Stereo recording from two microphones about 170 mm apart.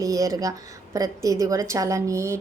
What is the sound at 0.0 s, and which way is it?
A woman's voice, 20° right (ahead or behind).